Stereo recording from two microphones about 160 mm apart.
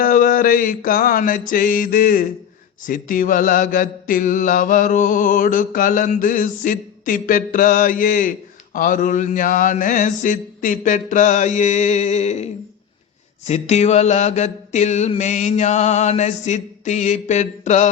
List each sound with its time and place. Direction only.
0.0 s mantra: 60° left (ahead or behind); by 12.5 s 45° left (ahead or behind)
13.5 s mantra: 45° left (ahead or behind)